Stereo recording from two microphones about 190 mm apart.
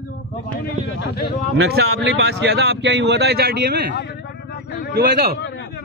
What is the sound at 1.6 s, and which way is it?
Speech, 65° right (ahead or behind).